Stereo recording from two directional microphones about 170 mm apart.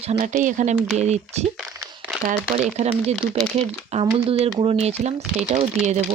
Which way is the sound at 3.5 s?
35° right (ahead or behind).